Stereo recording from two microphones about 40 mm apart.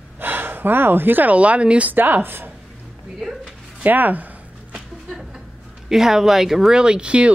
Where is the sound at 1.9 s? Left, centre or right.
Right.